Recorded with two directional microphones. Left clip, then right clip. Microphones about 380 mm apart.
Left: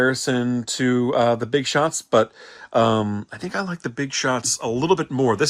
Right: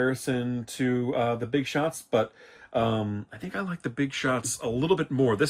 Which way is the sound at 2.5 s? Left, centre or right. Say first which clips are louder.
Left 10 dB; centre.